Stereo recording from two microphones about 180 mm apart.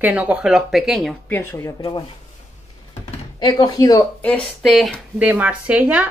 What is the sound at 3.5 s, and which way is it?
Speech, 20° left (ahead or behind).